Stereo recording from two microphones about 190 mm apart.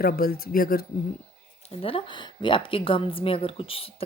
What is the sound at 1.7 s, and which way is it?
A woman's voice, 30° left (ahead or behind).